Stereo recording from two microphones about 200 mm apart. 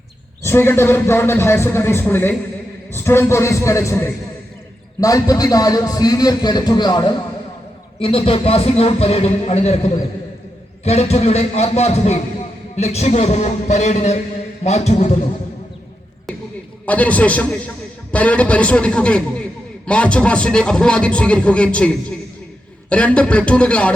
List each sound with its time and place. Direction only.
0.4 s a man's voice: 10° left (ahead or behind); by 15.2 s 35° left (ahead or behind)
16.8 s a man's voice: 5° left (ahead or behind)